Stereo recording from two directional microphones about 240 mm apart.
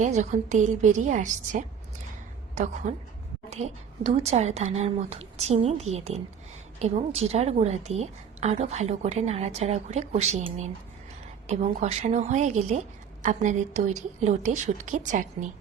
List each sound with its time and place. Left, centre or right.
0.0 s a woman's voice: right
2.8 s a woman's voice: right